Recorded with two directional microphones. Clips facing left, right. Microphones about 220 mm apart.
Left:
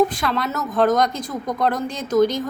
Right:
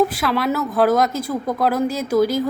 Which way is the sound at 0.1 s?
5° right (ahead or behind).